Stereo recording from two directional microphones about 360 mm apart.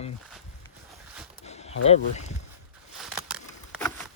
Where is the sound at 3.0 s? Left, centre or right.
Centre.